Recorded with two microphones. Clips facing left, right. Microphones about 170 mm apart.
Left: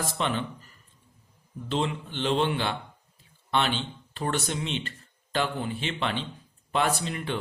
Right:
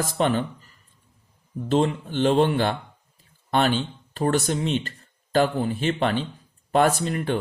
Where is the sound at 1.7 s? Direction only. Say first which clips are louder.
Right 7 dB; 45° right (ahead or behind).